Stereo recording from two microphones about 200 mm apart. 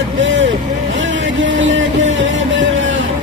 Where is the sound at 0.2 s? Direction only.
70° right (ahead or behind).